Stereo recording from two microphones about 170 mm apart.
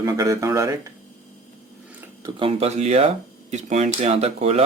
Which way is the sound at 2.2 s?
25° right (ahead or behind).